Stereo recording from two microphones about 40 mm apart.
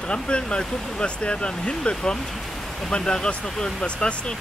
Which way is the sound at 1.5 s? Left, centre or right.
Centre.